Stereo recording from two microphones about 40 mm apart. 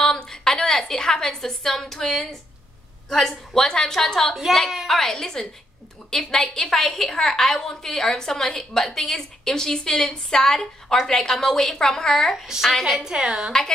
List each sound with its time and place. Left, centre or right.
0.0 s a sound: centre
3.1 s a woman's voice: centre
12.8 s a woman's voice: centre
13.1 s a woman's voice: centre